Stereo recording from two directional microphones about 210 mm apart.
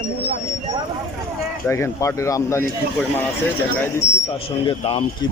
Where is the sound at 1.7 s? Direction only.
15° left (ahead or behind).